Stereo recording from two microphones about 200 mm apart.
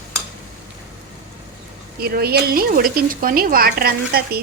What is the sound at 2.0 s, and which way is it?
Speech, 50° right (ahead or behind).